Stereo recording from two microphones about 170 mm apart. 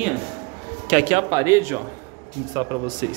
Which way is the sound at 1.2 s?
20° right (ahead or behind).